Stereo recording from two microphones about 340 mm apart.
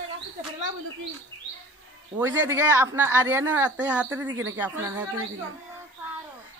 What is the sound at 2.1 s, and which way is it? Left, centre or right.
Speech, centre.